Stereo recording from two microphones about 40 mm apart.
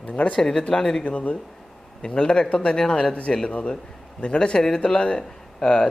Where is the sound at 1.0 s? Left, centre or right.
Left.